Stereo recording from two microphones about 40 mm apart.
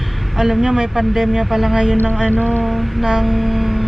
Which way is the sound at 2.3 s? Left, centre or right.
Left.